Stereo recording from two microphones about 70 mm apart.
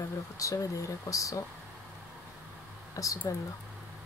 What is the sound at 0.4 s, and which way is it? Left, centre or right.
Speech, left.